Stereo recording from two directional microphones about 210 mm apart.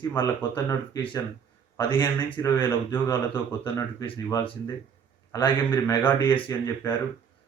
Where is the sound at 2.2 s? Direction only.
20° left (ahead or behind).